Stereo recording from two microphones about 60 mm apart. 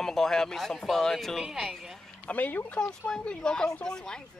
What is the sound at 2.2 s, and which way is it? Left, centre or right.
Speech, left.